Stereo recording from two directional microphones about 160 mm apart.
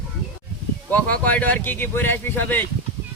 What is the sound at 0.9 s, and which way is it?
Speech, 10° left (ahead or behind).